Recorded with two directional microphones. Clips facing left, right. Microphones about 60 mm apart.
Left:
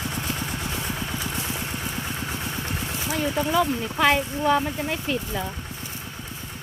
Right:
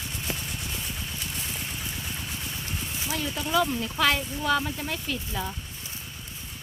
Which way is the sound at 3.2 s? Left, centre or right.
Left.